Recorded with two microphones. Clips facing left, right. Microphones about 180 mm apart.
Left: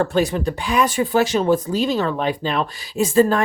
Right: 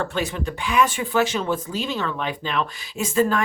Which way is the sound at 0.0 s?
35° left (ahead or behind).